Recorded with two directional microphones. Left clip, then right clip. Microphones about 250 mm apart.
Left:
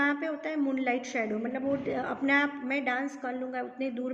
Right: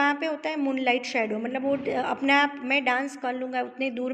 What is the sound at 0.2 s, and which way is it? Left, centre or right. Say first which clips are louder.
A woman's voice: right 4 dB; right.